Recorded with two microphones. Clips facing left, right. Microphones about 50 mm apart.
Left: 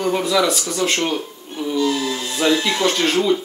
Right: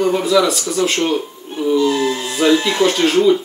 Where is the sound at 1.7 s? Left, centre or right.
Right.